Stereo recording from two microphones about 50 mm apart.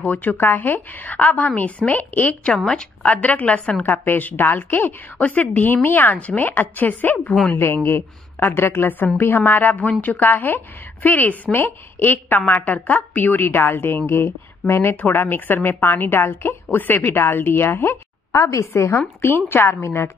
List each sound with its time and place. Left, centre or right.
0.0 s a woman's voice: left
2.4 s a woman's voice: left
3.9 s a woman's voice: left
7.5 s a woman's voice: left
11.5 s a woman's voice: left
18.3 s a woman's voice: left
19.5 s a woman's voice: left